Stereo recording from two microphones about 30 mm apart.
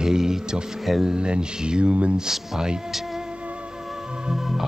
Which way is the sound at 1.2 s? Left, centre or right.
Right.